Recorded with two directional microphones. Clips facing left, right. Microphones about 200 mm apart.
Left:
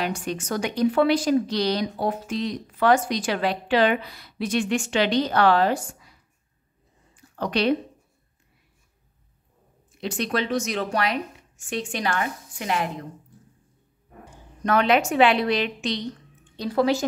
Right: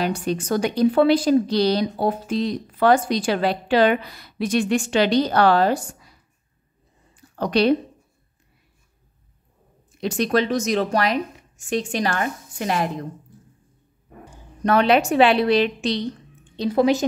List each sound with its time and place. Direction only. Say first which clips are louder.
0.2 s a woman's voice: right 5 dB; 35° right (ahead or behind)
7.2 s a sound: right 5 dB; 35° right (ahead or behind)
9.9 s a woman's voice: right 6 dB; 40° right (ahead or behind)
14.6 s a woman's voice: right 3 dB; 30° right (ahead or behind)
16.5 s a woman's voice: right 3 dB; 20° right (ahead or behind)